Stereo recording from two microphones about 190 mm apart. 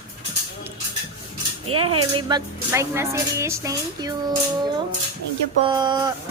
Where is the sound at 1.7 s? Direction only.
25° right (ahead or behind).